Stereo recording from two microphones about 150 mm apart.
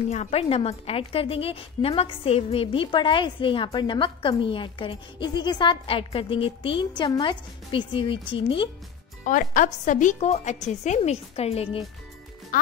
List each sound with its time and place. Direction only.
0.1 s a woman's voice: 45° left (ahead or behind)
9.2 s speech: 60° left (ahead or behind); by 11.8 s 40° left (ahead or behind)